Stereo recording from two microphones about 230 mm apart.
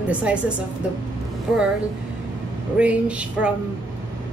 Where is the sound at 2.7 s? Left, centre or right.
Centre.